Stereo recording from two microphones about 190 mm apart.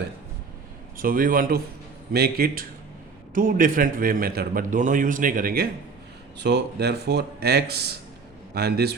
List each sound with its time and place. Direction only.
0.9 s a man's voice: 45° right (ahead or behind)
6.4 s speech: 60° right (ahead or behind)